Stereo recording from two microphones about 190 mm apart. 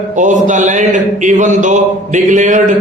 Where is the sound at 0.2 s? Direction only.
40° right (ahead or behind).